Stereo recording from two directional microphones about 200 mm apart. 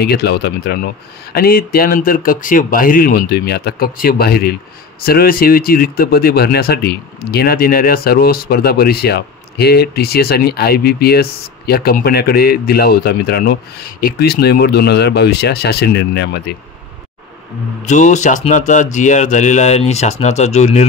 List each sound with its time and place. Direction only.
0.0 s speech: 55° left (ahead or behind)
17.8 s speech: 35° left (ahead or behind)